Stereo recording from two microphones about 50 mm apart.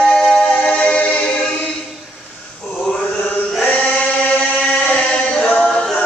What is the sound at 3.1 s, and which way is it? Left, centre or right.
Chant, left.